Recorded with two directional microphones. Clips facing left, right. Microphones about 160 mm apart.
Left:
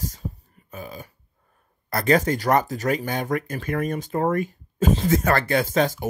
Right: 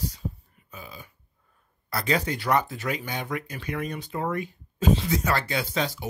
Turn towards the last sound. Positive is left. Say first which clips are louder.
# left 7 dB
turn(degrees=50)  # may be behind; listen again after turning